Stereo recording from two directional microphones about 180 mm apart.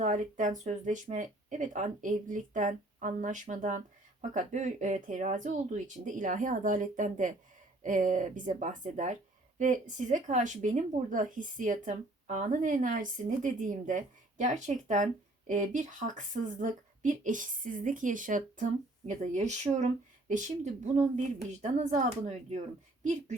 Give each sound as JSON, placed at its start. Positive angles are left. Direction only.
{"t": 0.0, "sound": "a woman's voice", "side_deg": -45}